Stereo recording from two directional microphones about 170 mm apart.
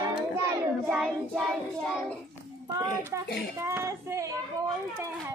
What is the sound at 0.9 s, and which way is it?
Child singing, 5° right (ahead or behind).